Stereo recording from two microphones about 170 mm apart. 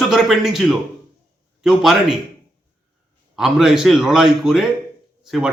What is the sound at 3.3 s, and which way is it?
A man's voice, 5° right (ahead or behind).